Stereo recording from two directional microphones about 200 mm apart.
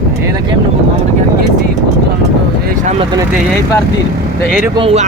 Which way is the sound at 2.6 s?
40° right (ahead or behind).